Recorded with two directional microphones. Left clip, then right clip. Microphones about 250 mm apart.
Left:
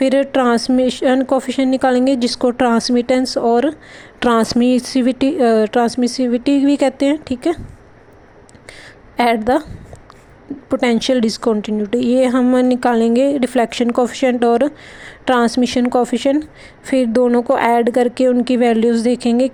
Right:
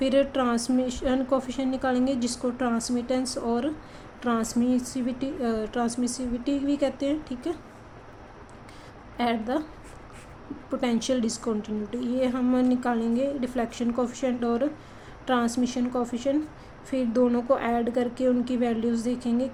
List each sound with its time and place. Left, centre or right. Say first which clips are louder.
0.0 s speech: left 9 dB; left
9.1 s speech: left 13 dB; left
10.7 s speech: left 11 dB; left